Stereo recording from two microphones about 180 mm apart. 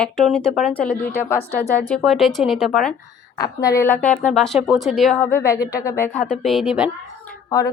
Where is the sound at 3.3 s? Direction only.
20° left (ahead or behind).